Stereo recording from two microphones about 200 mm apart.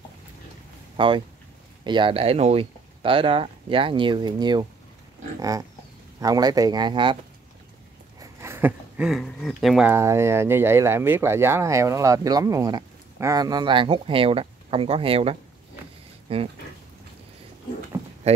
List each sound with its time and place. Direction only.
0.9 s speech: 25° right (ahead or behind)
6.1 s speech: 20° right (ahead or behind)
8.2 s speech: 15° right (ahead or behind); by 16.4 s 30° right (ahead or behind)